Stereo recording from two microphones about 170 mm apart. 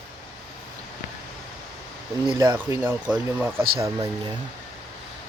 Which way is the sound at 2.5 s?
15° right (ahead or behind).